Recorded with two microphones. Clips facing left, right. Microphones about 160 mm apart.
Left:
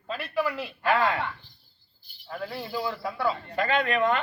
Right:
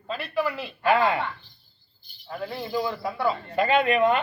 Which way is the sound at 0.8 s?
15° right (ahead or behind).